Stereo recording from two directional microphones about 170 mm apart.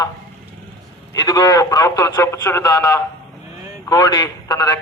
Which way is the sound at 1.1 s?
25° left (ahead or behind).